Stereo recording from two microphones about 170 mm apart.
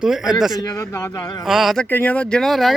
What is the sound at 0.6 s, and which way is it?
Speech, 20° left (ahead or behind).